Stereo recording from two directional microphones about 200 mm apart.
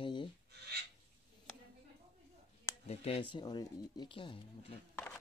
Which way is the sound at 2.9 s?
30° left (ahead or behind).